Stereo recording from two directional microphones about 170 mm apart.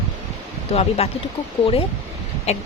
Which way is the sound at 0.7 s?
35° left (ahead or behind).